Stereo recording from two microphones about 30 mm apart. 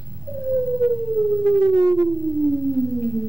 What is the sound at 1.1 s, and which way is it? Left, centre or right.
Siren, right.